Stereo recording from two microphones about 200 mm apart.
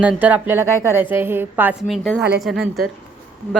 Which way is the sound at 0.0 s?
5° right (ahead or behind).